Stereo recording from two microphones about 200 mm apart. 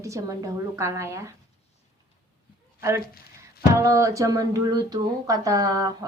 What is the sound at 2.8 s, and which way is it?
Speech, 15° right (ahead or behind).